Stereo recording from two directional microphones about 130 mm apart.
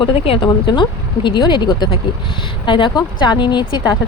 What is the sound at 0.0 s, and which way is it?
Speech, 40° left (ahead or behind).